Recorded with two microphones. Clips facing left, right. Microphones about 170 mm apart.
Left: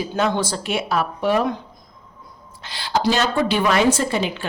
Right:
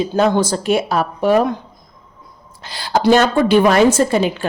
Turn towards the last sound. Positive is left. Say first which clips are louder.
# right 7 dB
turn(degrees=-45)  # may be behind; listen again after turning